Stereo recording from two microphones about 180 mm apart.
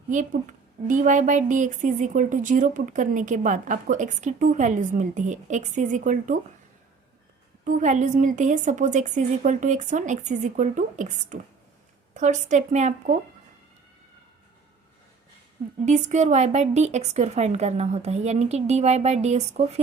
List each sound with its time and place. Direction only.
0.9 s a woman's voice: 45° right (ahead or behind)
7.6 s a woman's voice: 45° right (ahead or behind)
15.9 s a woman's voice: 40° right (ahead or behind)